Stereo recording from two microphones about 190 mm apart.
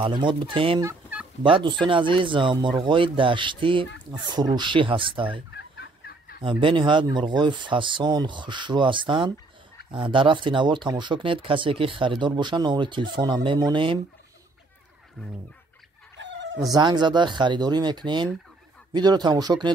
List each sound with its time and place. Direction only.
0.0 s speech: 25° right (ahead or behind)
5.5 s fowl: 60° left (ahead or behind)
6.4 s speech: 25° right (ahead or behind)
16.2 s chicken: 70° right (ahead or behind)
16.6 s speech: 20° right (ahead or behind)